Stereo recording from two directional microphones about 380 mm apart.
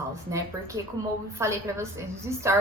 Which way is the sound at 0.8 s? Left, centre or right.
Centre.